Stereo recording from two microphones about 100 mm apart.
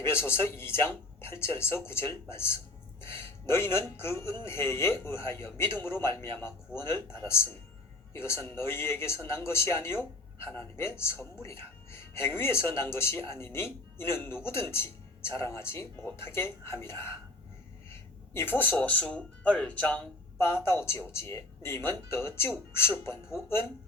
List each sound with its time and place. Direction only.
0.0 s speech: 25° left (ahead or behind)
18.5 s speech: 20° left (ahead or behind)
20.7 s speech: 25° left (ahead or behind)